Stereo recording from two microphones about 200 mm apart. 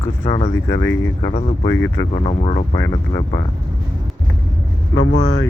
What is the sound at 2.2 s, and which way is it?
Speech, 30° left (ahead or behind).